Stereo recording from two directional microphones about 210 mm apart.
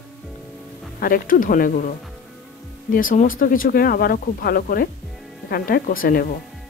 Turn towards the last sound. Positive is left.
turn(degrees=40)  # may be behind; listen again after turning